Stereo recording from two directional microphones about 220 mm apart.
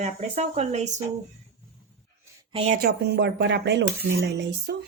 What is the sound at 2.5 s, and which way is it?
Speech, 25° right (ahead or behind).